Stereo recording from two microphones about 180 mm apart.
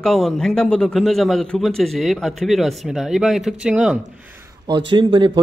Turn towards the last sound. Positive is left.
turn(degrees=-30)  # may be behind; listen again after turning